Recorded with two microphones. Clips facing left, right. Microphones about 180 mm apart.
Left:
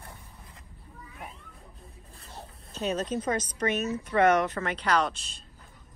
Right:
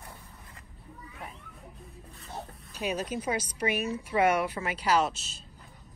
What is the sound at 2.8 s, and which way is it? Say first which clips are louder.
Speech: left 3 dB; 10° right (ahead or behind).